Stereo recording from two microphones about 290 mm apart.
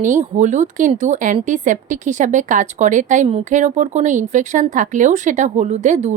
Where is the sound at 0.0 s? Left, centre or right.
Right.